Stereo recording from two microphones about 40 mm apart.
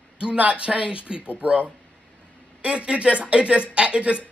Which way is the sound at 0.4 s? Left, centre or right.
Right.